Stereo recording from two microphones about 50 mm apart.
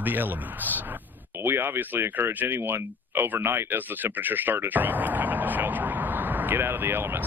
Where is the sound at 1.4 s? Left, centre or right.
Right.